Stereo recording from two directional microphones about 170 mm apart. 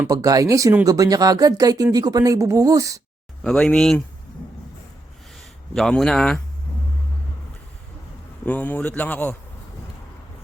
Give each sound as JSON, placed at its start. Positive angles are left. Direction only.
{"t": 0.1, "sound": "speech", "side_deg": -20}
{"t": 3.4, "sound": "speech", "side_deg": 5}
{"t": 5.7, "sound": "speech", "side_deg": 5}
{"t": 8.4, "sound": "a man's voice", "side_deg": 10}